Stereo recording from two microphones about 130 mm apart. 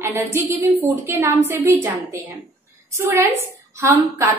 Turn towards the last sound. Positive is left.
turn(degrees=-20)  # may be behind; listen again after turning